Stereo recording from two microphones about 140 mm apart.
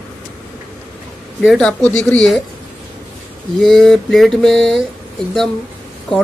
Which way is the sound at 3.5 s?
5° left (ahead or behind).